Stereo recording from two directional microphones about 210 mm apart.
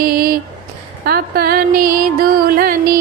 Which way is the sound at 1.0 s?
45° right (ahead or behind).